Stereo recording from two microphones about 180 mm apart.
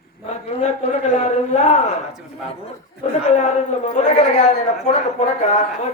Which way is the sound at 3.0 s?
40° left (ahead or behind).